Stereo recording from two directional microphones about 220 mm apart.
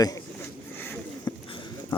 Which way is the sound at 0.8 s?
10° left (ahead or behind).